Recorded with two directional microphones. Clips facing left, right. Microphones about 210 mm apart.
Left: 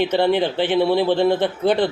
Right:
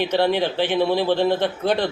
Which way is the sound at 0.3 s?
15° left (ahead or behind).